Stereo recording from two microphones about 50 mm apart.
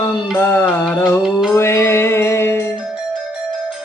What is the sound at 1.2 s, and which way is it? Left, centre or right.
Music, centre.